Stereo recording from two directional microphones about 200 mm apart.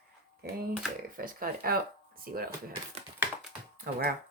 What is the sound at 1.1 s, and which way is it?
Speech, 45° right (ahead or behind).